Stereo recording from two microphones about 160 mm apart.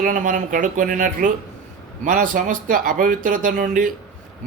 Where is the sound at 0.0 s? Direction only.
55° right (ahead or behind).